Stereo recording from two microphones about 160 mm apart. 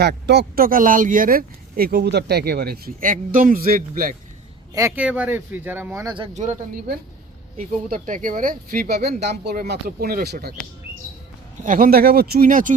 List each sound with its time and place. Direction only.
0.0 s speech: 90° right; by 4.1 s 65° right (ahead or behind)
4.7 s speech: 20° right (ahead or behind)
7.9 s speech: 60° right (ahead or behind)
11.6 s speech: 60° right (ahead or behind)